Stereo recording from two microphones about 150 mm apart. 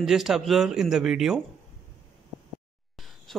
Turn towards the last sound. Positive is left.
turn(degrees=0)  # may be behind; listen again after turning